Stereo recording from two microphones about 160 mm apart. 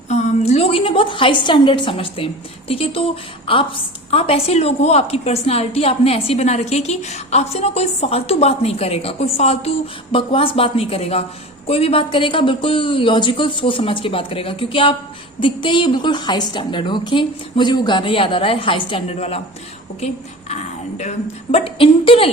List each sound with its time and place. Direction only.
0.1 s a woman's voice: 45° left (ahead or behind)
20.5 s a woman's voice: 45° left (ahead or behind)